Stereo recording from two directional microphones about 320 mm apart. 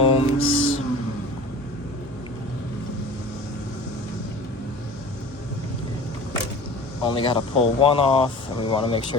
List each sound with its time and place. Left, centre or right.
0.0 s music: centre
0.3 s music: left
7.0 s speech: centre